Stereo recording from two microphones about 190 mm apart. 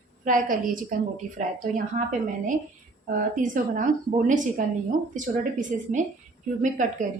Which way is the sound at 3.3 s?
45° right (ahead or behind).